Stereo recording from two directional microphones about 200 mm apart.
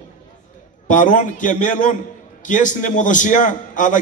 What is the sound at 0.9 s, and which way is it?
A man's voice, 40° left (ahead or behind).